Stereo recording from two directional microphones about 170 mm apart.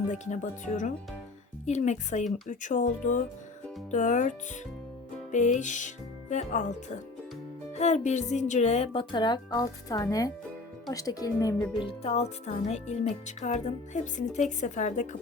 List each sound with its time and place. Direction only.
0.1 s speech: 45° left (ahead or behind)
7.8 s speech: 45° left (ahead or behind)